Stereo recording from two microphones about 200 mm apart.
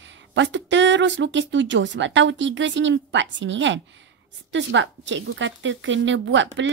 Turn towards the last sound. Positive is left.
turn(degrees=-65)  # may be behind; listen again after turning